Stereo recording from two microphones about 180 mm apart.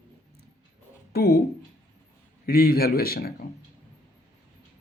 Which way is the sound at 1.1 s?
60° left (ahead or behind).